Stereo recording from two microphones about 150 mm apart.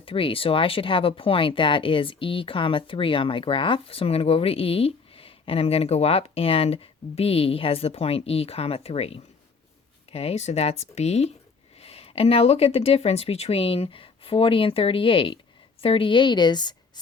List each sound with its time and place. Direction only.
0.0 s speech: 35° left (ahead or behind)